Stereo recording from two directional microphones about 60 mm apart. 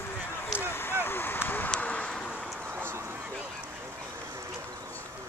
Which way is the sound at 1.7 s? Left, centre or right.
Left.